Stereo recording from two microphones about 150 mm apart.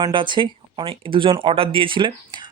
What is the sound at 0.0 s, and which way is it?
Speech, 30° right (ahead or behind).